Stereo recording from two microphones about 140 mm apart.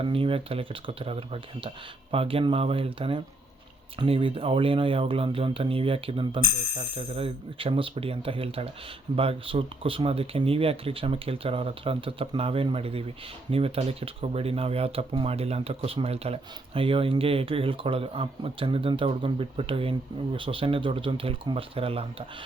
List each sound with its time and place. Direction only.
0.0 s speech: 40° right (ahead or behind)